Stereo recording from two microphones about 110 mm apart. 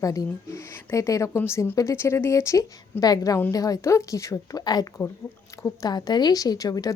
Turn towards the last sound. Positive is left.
turn(degrees=35)  # may be behind; listen again after turning